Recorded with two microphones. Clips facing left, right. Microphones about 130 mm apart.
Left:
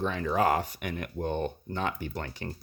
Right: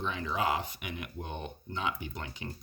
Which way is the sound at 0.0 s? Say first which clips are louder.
Left 6 dB; 50° left (ahead or behind).